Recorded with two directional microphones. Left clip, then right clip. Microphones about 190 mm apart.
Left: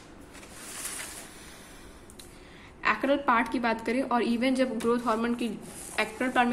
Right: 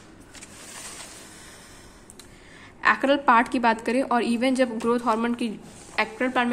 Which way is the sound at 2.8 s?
20° right (ahead or behind).